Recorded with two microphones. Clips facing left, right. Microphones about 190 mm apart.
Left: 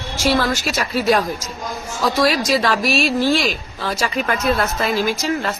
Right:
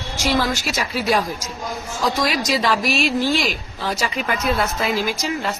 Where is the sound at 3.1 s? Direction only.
15° left (ahead or behind).